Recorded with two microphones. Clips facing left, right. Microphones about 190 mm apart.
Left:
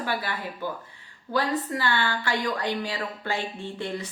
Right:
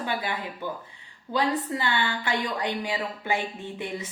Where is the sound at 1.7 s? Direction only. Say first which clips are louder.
Left 1 dB; 25° right (ahead or behind).